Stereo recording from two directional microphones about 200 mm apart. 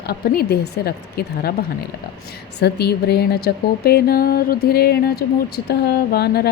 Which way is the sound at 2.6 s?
55° left (ahead or behind).